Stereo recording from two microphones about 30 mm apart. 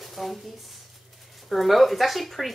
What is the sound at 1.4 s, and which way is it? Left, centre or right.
Speech, centre.